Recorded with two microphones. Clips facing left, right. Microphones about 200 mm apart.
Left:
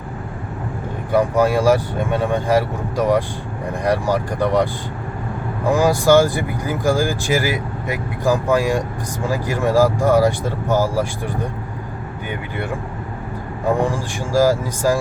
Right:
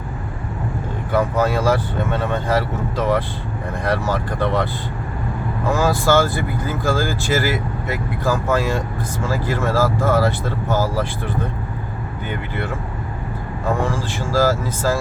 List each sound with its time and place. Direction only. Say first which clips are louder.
1.1 s speech: left 3 dB; 15° left (ahead or behind)
13.7 s speech: left 3 dB; 15° left (ahead or behind)